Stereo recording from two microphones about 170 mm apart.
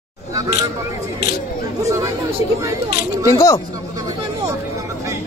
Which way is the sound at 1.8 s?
20° right (ahead or behind).